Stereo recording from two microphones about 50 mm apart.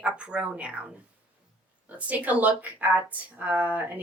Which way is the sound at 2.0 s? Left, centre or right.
Right.